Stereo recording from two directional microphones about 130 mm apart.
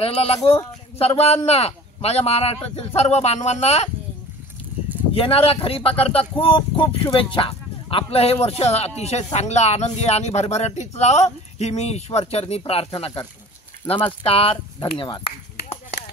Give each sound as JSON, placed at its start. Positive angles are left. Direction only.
{"t": 0.0, "sound": "speech", "side_deg": 50}
{"t": 5.1, "sound": "speech", "side_deg": 45}